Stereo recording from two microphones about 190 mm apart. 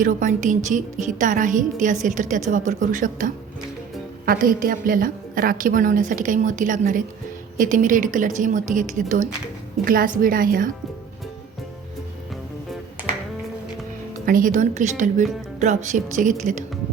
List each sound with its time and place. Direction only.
0.0 s a woman's voice: 40° right (ahead or behind)
14.3 s speech: 45° right (ahead or behind)